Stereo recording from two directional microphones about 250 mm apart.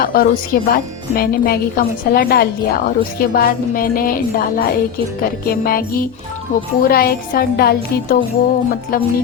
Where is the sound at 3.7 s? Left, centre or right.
Left.